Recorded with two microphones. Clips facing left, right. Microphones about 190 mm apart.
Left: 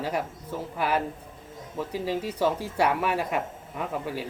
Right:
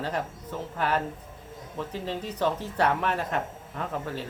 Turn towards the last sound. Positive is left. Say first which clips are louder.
# left 1 dB
turn(degrees=10)  # may be behind; listen again after turning